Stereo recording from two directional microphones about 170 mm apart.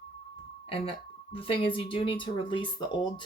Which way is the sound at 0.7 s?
35° left (ahead or behind).